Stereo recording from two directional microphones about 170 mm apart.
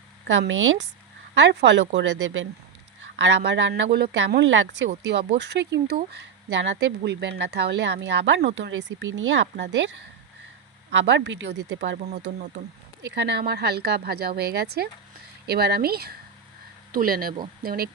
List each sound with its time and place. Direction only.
0.3 s speech: 90° right
3.9 s speech: 80° right
10.9 s speech: 90° right
11.9 s speech: 45° right (ahead or behind)
13.1 s speech: 85° right; by 17.8 s 60° right (ahead or behind)